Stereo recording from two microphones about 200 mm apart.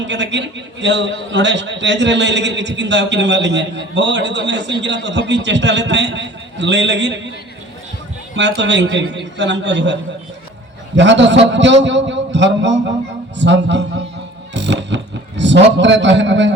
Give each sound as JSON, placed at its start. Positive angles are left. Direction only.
{"t": 0.1, "sound": "a man's voice", "side_deg": -60}
{"t": 8.4, "sound": "a man's voice", "side_deg": -60}